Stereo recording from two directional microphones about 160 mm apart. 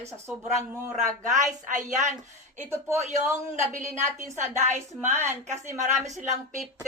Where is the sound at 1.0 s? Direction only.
50° right (ahead or behind).